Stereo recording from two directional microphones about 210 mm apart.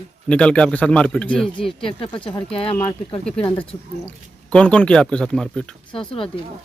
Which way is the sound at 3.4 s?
25° left (ahead or behind).